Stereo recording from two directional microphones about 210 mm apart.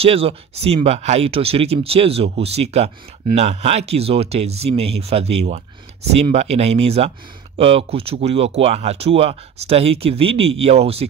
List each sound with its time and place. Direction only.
0.0 s speech: 25° right (ahead or behind)